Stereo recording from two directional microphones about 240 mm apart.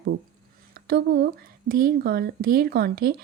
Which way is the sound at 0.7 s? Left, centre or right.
Right.